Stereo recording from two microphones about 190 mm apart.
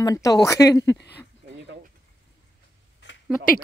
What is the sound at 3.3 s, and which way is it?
Speech, 45° left (ahead or behind).